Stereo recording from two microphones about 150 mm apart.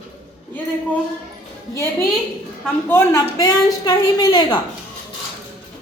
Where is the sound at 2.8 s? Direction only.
15° left (ahead or behind).